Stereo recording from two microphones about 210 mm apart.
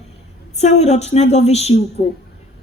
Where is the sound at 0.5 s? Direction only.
30° left (ahead or behind).